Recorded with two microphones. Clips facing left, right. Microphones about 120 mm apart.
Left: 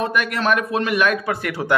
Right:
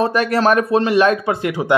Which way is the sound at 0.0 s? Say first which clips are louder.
Right 6 dB; 35° right (ahead or behind).